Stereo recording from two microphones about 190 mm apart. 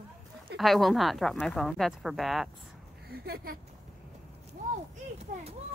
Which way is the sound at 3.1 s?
55° right (ahead or behind).